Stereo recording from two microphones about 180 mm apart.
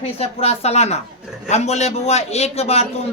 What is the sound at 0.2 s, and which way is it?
A man's voice, 35° left (ahead or behind).